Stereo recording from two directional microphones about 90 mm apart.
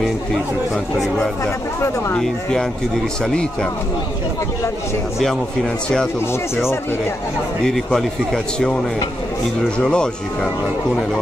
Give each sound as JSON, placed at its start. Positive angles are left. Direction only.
{"t": 1.4, "sound": "speech", "side_deg": 25}
{"t": 2.1, "sound": "speech", "side_deg": 5}
{"t": 7.6, "sound": "a man's voice", "side_deg": 5}
{"t": 9.8, "sound": "a man's voice", "side_deg": 10}